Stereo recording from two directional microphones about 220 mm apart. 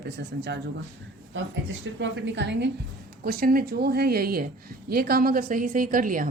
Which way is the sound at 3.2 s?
40° right (ahead or behind).